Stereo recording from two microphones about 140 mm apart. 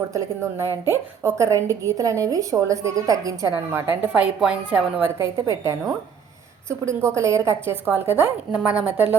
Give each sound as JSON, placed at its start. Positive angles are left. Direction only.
{"t": 0.1, "sound": "a woman's voice", "side_deg": -20}
{"t": 5.1, "sound": "a woman's voice", "side_deg": -20}
{"t": 7.2, "sound": "a woman's voice", "side_deg": -20}